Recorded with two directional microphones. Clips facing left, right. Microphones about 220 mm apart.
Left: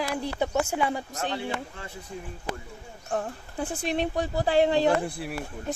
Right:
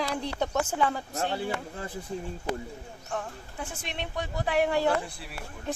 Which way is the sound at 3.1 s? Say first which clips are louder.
Left 5 dB; 35° left (ahead or behind).